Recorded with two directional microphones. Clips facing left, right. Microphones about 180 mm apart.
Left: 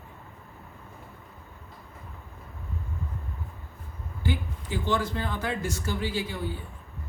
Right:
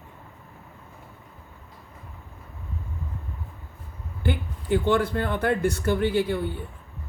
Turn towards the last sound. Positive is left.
turn(degrees=-60)  # may be behind; listen again after turning